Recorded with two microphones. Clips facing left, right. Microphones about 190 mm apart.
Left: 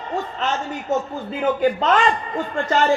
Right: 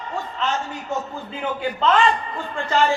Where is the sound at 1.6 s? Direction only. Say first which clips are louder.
Right 1 dB; 40° left (ahead or behind).